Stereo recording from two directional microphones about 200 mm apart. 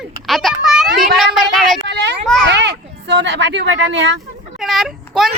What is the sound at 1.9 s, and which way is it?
Children playing, 60° right (ahead or behind).